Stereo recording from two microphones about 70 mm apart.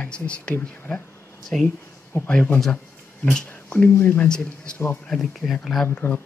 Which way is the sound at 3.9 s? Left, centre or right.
Left.